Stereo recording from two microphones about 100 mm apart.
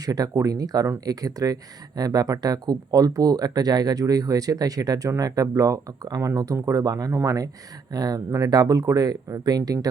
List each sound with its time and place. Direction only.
0.0 s speech: 40° right (ahead or behind)